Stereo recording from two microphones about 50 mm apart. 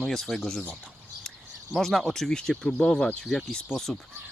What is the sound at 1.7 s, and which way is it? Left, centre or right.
Speech, centre.